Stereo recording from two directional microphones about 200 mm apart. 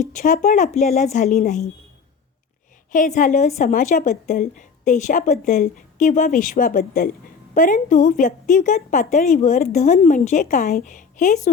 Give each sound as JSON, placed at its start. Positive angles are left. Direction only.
{"t": 0.1, "sound": "a woman's voice", "side_deg": 40}
{"t": 2.9, "sound": "a woman's voice", "side_deg": 40}